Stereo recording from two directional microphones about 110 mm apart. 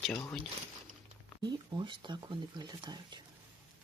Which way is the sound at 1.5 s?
45° right (ahead or behind).